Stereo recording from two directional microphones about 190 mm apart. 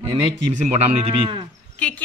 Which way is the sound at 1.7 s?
5° left (ahead or behind).